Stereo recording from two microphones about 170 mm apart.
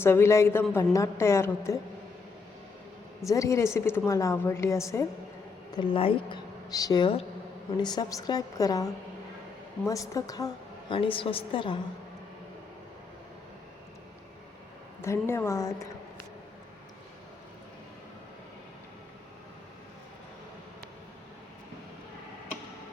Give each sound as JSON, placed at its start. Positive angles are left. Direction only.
{"t": 0.0, "sound": "a woman's voice", "side_deg": 15}
{"t": 3.2, "sound": "a woman's voice", "side_deg": 20}
{"t": 5.7, "sound": "a woman's voice", "side_deg": 30}
{"t": 15.0, "sound": "a woman's voice", "side_deg": 15}